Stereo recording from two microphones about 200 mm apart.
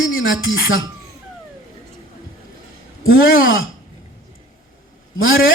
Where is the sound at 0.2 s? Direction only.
75° left (ahead or behind).